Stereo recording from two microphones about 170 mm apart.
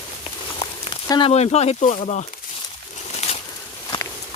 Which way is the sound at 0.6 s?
25° left (ahead or behind).